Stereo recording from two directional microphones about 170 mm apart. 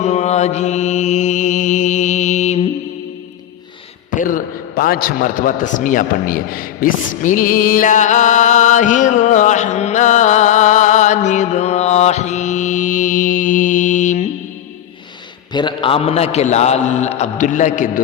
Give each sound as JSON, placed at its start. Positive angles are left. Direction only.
{"t": 0.0, "sound": "mantra", "side_deg": 40}
{"t": 4.1, "sound": "a man's voice", "side_deg": 55}
{"t": 15.5, "sound": "a man's voice", "side_deg": 30}